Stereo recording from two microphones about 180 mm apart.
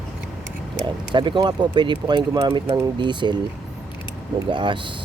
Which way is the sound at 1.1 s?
25° right (ahead or behind).